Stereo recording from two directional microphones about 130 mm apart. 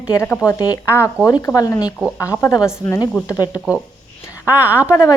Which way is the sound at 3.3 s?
30° left (ahead or behind).